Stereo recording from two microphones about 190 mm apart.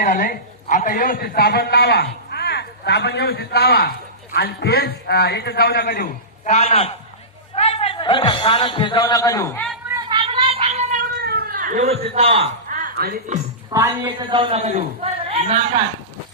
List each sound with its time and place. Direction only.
0.0 s a man's voice: 50° left (ahead or behind); by 9.6 s 15° left (ahead or behind)
10.1 s cat: 25° right (ahead or behind)
11.2 s cat: 55° right (ahead or behind); by 12.5 s 30° right (ahead or behind)
12.6 s music: 45° right (ahead or behind)
13.7 s a man's voice: 15° right (ahead or behind)
14.2 s a man's voice: 25° right (ahead or behind)